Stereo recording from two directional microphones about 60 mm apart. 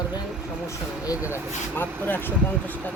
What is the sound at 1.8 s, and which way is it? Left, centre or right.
Speech, left.